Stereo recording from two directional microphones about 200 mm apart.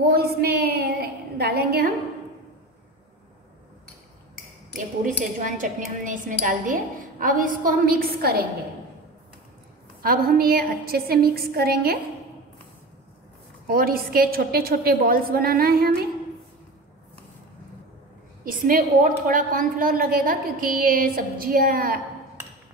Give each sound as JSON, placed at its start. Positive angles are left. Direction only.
{"t": 0.0, "sound": "a sound", "side_deg": -50}
{"t": 5.4, "sound": "a woman's voice", "side_deg": -40}
{"t": 10.0, "sound": "a woman's voice", "side_deg": -45}
{"t": 13.7, "sound": "a woman's voice", "side_deg": -45}
{"t": 18.4, "sound": "a woman's voice", "side_deg": -45}